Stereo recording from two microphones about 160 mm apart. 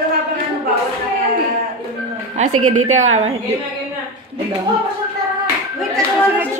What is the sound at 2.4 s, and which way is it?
Speech, 45° right (ahead or behind).